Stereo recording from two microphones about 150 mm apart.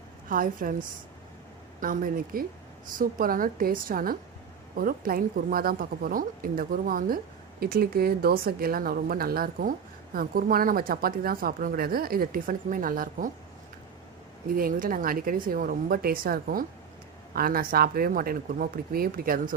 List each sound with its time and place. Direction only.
0.3 s speech: 65° right (ahead or behind)
7.6 s speech: 90° right; by 13.3 s 65° right (ahead or behind)
14.5 s speech: 65° right (ahead or behind)